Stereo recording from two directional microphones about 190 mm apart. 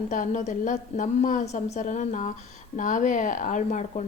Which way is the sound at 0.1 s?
40° left (ahead or behind).